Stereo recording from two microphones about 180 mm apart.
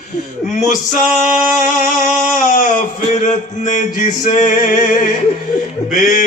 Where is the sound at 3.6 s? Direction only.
45° left (ahead or behind).